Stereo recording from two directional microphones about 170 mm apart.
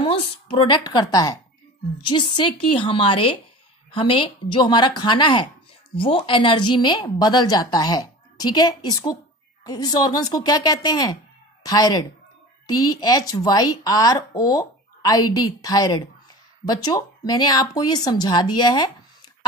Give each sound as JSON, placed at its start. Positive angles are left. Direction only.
{"t": 0.0, "sound": "a woman's voice", "side_deg": 30}